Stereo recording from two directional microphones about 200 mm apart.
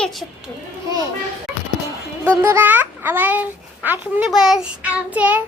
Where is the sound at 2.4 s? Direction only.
10° right (ahead or behind).